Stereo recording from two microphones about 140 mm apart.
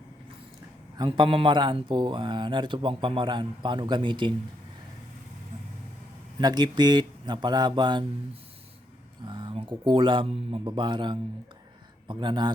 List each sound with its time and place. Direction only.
0.9 s speech: 35° right (ahead or behind)
6.4 s speech: 30° right (ahead or behind)
9.2 s speech: 35° right (ahead or behind)